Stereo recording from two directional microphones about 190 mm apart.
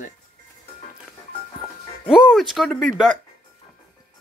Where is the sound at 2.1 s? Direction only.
Centre (ahead or behind).